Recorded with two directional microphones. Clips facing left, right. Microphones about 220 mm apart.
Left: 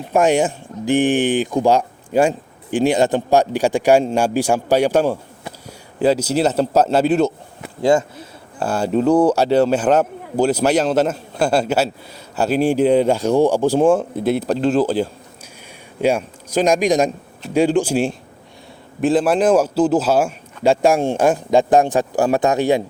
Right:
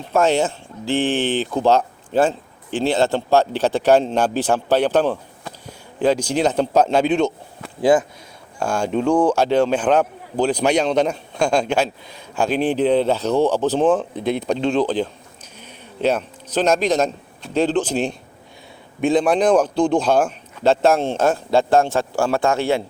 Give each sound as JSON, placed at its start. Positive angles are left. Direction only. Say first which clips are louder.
{"t": 0.1, "sound": "a man's voice", "louder": "left 2 dB", "side_deg": 15}